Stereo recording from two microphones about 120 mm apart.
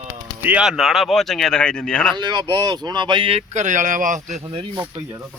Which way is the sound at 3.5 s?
85° right.